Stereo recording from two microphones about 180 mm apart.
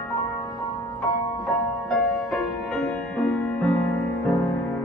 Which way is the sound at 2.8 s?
5° left (ahead or behind).